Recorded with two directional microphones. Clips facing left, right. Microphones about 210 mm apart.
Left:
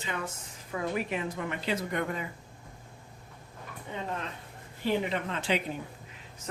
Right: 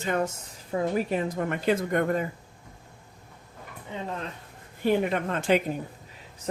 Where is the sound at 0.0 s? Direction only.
45° right (ahead or behind).